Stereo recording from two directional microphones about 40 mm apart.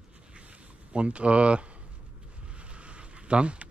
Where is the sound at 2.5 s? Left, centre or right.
Right.